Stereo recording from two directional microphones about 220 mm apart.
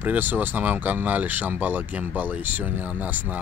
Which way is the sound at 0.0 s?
10° right (ahead or behind).